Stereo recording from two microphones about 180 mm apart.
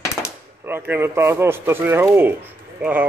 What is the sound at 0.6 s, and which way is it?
A man's voice, 10° right (ahead or behind).